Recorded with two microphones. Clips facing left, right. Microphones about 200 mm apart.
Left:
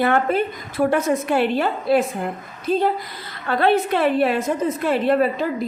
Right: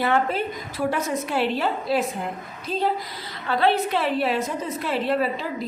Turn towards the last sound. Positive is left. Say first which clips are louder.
# left 5 dB
turn(degrees=50)  # may be behind; listen again after turning